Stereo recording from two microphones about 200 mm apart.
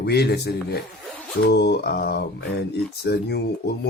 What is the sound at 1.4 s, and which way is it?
Speech, 55° left (ahead or behind).